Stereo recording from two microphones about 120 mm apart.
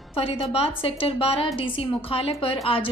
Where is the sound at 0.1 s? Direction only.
50° left (ahead or behind).